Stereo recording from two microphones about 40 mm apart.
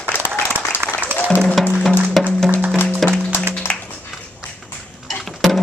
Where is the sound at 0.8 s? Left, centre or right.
Right.